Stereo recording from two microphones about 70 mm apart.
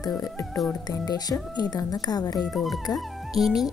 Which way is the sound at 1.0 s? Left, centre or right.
Left.